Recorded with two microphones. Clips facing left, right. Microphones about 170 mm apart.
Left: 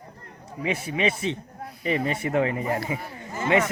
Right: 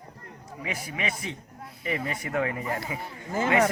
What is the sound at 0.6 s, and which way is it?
Speech, 25° left (ahead or behind).